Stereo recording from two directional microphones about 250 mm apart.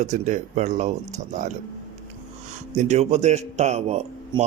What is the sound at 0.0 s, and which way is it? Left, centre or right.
A man's voice, right.